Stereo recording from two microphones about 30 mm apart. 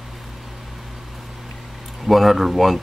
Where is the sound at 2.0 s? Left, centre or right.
Centre.